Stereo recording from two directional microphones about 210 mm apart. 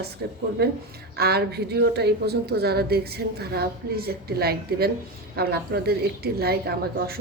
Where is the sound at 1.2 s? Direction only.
50° right (ahead or behind).